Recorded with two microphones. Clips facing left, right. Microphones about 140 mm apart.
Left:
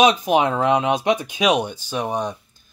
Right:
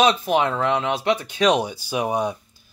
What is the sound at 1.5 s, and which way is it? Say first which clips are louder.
Speech: even; 5° right (ahead or behind).